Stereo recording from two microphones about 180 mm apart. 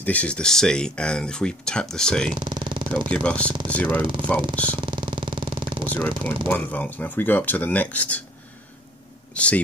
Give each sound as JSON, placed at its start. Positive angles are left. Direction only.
{"t": 0.0, "sound": "speech", "side_deg": 10}
{"t": 2.3, "sound": "a sound", "side_deg": -25}
{"t": 3.1, "sound": "speech", "side_deg": 5}
{"t": 4.6, "sound": "vehicle", "side_deg": -25}
{"t": 5.9, "sound": "speech", "side_deg": 10}
{"t": 9.3, "sound": "speech", "side_deg": 5}